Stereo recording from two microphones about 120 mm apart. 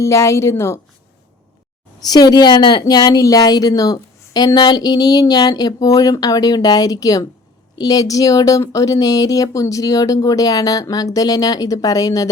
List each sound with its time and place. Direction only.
0.0 s a woman's voice: 25° left (ahead or behind)
2.0 s speech: 35° left (ahead or behind)